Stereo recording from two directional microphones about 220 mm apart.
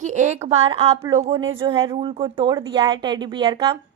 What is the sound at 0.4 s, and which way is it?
Speech, 25° right (ahead or behind).